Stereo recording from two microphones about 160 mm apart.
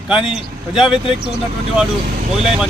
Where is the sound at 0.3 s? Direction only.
5° right (ahead or behind).